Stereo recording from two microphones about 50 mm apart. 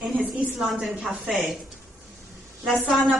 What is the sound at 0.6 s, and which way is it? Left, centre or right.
A woman's voice, centre.